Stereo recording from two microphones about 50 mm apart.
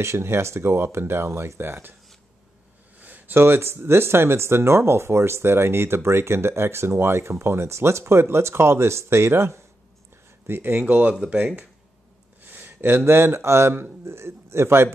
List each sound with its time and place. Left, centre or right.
0.0 s speech: right
3.0 s a sound: right
3.3 s speech: right
10.4 s speech: right
12.4 s a sound: right
13.0 s speech: right